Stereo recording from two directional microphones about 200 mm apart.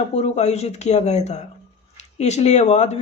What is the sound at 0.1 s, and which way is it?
A man's voice, 35° left (ahead or behind).